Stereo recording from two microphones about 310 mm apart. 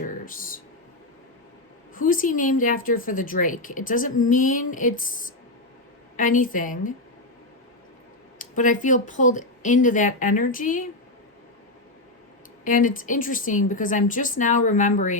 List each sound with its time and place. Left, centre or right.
0.0 s a sound: left
2.0 s a woman's voice: left
6.1 s a woman's voice: left
8.4 s a woman's voice: left
12.6 s a woman's voice: left